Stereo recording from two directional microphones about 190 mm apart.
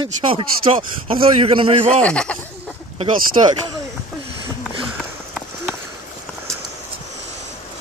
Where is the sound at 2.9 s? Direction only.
25° right (ahead or behind).